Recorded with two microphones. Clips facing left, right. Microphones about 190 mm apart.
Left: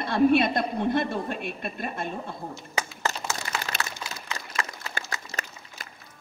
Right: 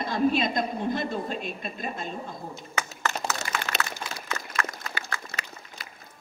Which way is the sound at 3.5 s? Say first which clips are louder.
Right 1 dB; 40° left (ahead or behind).